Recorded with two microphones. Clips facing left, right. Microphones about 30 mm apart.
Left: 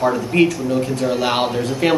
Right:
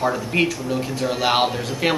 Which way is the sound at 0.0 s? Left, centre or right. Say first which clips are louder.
Left 4 dB; centre.